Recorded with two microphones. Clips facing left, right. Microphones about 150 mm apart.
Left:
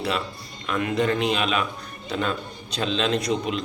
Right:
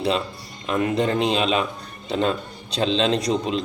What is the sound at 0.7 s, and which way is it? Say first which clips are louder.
A man's voice: right 2 dB; 30° right (ahead or behind).